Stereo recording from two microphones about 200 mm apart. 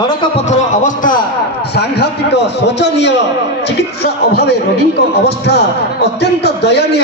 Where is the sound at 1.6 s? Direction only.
55° left (ahead or behind).